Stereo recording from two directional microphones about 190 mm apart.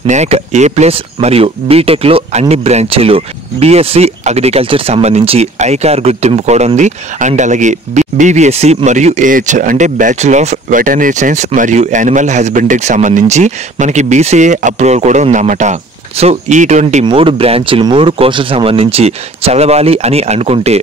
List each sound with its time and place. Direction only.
0.0 s speech: 35° right (ahead or behind)
17.0 s speech: 25° right (ahead or behind)